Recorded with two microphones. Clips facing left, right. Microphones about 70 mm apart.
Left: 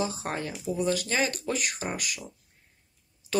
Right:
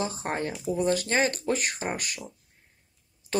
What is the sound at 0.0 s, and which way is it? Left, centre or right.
Speech, right.